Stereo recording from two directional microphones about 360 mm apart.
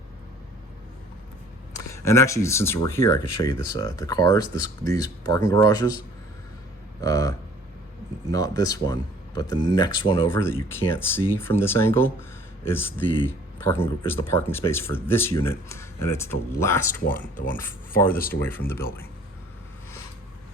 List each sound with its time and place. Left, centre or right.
1.7 s speech: centre
7.0 s speech: centre
17.2 s speech: left
17.5 s speech: centre
18.0 s speech: left
18.3 s speech: centre